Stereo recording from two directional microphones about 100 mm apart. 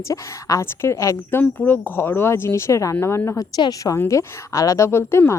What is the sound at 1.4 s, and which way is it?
Speech, 15° left (ahead or behind).